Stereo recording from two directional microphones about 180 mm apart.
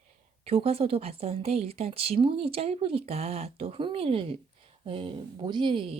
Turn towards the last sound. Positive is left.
turn(degrees=-30)  # may be behind; listen again after turning